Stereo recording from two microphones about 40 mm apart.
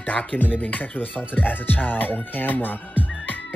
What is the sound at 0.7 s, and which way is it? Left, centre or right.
Speech, left.